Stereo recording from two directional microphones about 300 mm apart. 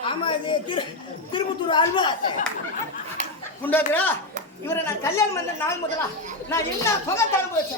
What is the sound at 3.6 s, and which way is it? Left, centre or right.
A man's voice, centre.